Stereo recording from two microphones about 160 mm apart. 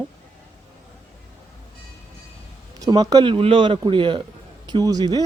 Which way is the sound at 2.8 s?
25° right (ahead or behind).